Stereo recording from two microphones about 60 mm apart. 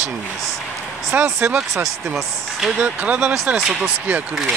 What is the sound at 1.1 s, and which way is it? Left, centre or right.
Speech, right.